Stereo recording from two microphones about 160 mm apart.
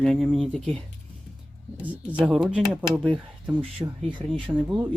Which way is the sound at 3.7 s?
30° right (ahead or behind).